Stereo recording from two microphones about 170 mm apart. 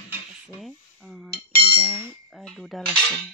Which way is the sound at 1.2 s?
65° left (ahead or behind).